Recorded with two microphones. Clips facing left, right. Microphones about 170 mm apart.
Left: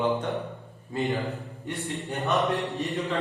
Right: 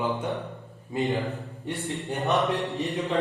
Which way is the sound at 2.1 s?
20° right (ahead or behind).